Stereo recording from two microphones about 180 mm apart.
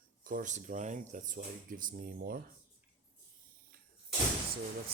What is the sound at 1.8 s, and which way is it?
Speech, 55° right (ahead or behind).